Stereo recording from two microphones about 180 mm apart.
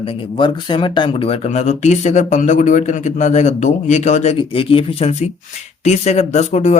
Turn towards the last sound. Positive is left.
turn(degrees=40)  # may be behind; listen again after turning